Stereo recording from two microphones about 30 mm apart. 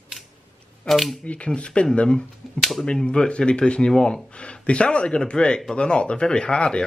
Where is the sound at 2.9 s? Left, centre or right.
Left.